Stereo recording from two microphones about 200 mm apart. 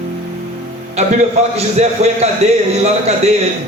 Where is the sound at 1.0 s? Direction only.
30° right (ahead or behind).